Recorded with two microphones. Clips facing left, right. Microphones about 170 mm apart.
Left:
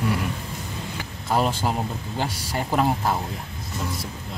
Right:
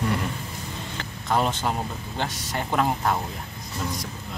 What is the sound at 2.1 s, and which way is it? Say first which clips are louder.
Speech: left 1 dB; 5° left (ahead or behind).